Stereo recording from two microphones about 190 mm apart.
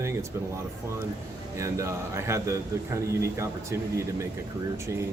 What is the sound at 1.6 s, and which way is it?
A man's voice, 15° right (ahead or behind).